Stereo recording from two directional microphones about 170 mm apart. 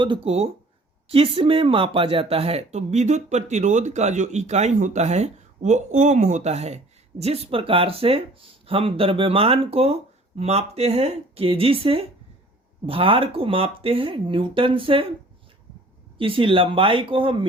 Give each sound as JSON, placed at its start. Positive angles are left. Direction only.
{"t": 0.0, "sound": "speech", "side_deg": -35}
{"t": 16.1, "sound": "speech", "side_deg": -30}